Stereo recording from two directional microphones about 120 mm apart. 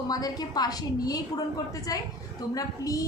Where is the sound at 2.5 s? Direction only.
30° left (ahead or behind).